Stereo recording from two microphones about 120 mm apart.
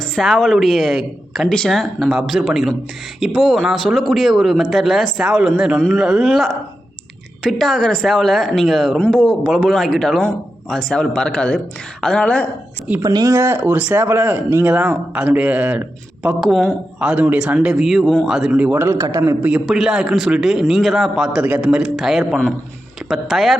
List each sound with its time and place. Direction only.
0.0 s a man's voice: centre (ahead or behind)
13.0 s speech: 30° right (ahead or behind); by 16.3 s 10° right (ahead or behind)
16.4 s a man's voice: centre (ahead or behind)
17.0 s speech: 10° right (ahead or behind)
19.6 s a man's voice: 5° right (ahead or behind)